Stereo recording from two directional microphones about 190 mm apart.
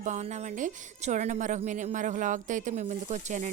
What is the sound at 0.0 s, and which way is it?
A woman's voice, 40° right (ahead or behind).